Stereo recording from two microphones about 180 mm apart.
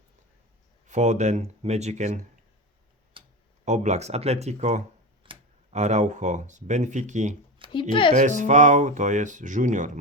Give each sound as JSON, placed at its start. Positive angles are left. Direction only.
{"t": 0.9, "sound": "speech", "side_deg": -40}
{"t": 3.2, "sound": "clicking", "side_deg": -30}
{"t": 3.7, "sound": "speech", "side_deg": -40}
{"t": 5.2, "sound": "tick-tock", "side_deg": -30}
{"t": 5.7, "sound": "speech", "side_deg": -40}
{"t": 7.7, "sound": "speech", "side_deg": 25}
{"t": 8.1, "sound": "speech", "side_deg": -45}